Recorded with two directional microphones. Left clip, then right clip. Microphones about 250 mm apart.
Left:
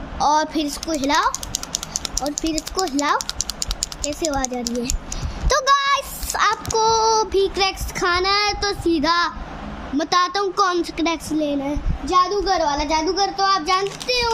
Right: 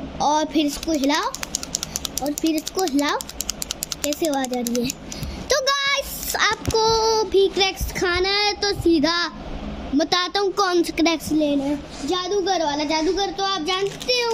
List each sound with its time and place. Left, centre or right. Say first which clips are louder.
0.2 s speech: left 1 dB; centre
4.2 s speech: left 1 dB; centre